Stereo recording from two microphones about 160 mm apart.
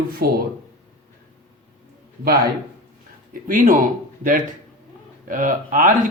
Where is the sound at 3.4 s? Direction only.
55° right (ahead or behind).